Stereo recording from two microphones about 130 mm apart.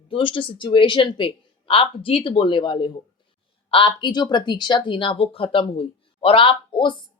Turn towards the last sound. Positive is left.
turn(degrees=40)  # may be behind; listen again after turning